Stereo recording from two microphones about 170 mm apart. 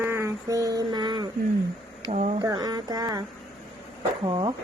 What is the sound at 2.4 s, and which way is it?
Speech, 20° right (ahead or behind).